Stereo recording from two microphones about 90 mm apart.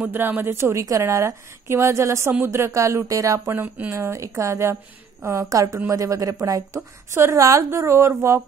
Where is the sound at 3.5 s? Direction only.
20° right (ahead or behind).